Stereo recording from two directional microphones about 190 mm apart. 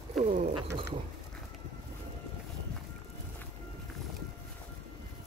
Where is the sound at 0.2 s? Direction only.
40° right (ahead or behind).